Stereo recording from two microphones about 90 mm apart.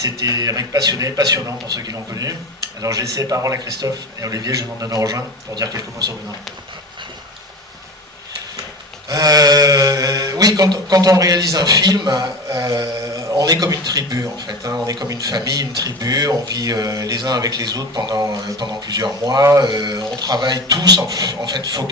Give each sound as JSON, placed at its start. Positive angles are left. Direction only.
{"t": 0.0, "sound": "speech", "side_deg": -45}
{"t": 9.0, "sound": "speech", "side_deg": -45}